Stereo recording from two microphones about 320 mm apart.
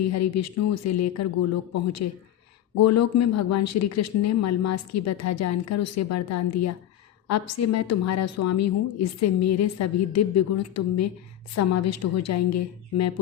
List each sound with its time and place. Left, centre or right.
0.1 s a woman's voice: left